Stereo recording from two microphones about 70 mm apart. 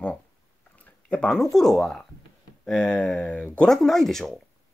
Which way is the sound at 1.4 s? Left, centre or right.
Centre.